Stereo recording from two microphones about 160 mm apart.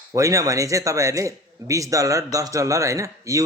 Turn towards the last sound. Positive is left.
turn(degrees=-20)  # may be behind; listen again after turning